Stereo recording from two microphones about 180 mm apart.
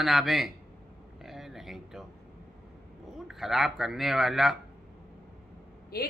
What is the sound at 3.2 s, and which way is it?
Speech, centre (ahead or behind).